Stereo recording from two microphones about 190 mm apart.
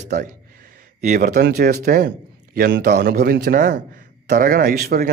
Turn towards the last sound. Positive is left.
turn(degrees=-55)  # may be behind; listen again after turning